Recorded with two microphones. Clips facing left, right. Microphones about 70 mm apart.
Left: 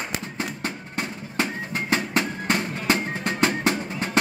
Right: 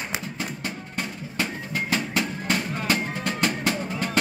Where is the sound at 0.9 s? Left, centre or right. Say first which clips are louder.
Left 2 dB; left.